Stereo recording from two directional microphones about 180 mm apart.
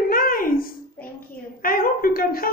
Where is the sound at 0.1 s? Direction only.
55° left (ahead or behind).